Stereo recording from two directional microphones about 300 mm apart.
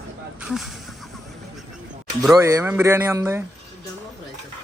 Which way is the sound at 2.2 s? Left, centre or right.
Centre.